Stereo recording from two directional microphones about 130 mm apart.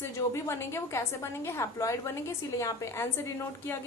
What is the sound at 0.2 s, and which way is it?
A woman's voice, 20° left (ahead or behind).